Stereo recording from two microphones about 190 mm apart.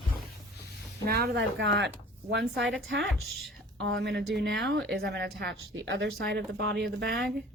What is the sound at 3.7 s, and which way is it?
A woman's voice, 65° right (ahead or behind).